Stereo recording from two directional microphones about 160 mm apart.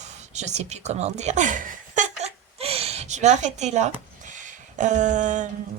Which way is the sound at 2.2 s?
40° right (ahead or behind).